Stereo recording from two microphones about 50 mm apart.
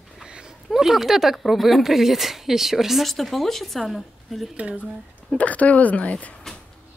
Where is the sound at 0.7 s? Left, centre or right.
Centre.